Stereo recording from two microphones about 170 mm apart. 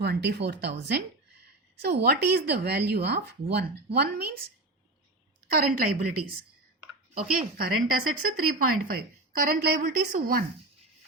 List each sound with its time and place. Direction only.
0.0 s speech: 80° right
5.5 s speech: 60° right (ahead or behind)